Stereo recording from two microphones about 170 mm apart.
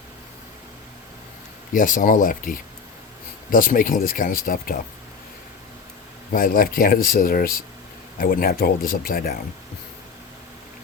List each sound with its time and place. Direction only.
1.7 s speech: 50° left (ahead or behind)
6.3 s speech: 55° left (ahead or behind)